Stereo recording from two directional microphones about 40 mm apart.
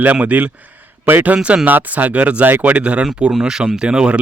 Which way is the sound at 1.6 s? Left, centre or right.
Right.